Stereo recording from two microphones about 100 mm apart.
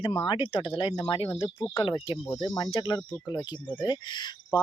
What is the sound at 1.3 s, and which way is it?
Speech, 65° left (ahead or behind).